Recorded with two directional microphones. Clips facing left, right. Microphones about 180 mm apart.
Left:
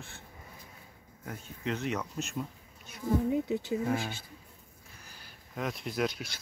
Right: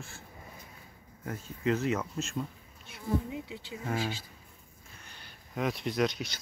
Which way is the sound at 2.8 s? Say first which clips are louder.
Left 4 dB; 45° left (ahead or behind).